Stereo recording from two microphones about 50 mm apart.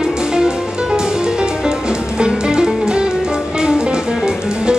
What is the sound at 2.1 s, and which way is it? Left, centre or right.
Music, centre.